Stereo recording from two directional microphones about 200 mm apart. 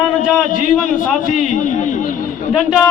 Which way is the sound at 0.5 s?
40° left (ahead or behind).